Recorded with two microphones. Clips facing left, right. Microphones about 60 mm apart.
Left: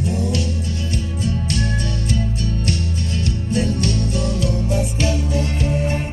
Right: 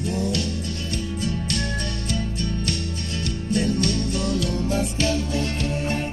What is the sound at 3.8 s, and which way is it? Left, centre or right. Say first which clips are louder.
Music: left 2 dB; left.